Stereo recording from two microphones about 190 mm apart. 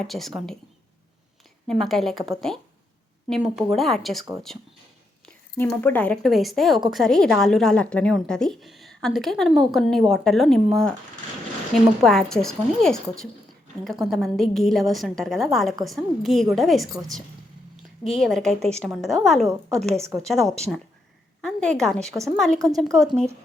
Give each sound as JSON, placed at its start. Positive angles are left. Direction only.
{"t": 0.0, "sound": "a woman's voice", "side_deg": 0}
{"t": 1.6, "sound": "a woman's voice", "side_deg": 0}
{"t": 18.2, "sound": "a woman's voice", "side_deg": 0}